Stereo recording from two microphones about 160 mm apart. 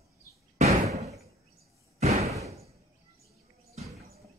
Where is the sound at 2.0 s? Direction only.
40° right (ahead or behind).